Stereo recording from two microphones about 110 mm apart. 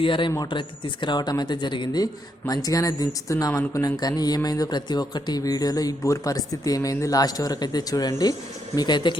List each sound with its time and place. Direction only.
0.0 s speech: 50° left (ahead or behind)
2.5 s speech: 30° left (ahead or behind)